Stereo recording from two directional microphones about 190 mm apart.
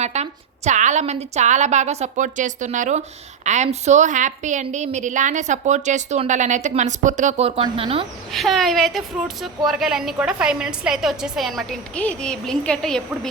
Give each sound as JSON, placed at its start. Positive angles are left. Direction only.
{"t": 0.0, "sound": "a woman's voice", "side_deg": -35}
{"t": 8.3, "sound": "a woman's voice", "side_deg": 0}